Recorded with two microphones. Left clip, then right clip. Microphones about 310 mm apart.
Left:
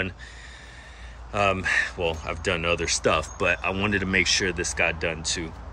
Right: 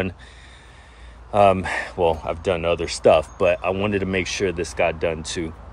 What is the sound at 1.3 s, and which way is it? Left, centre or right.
Speech, centre.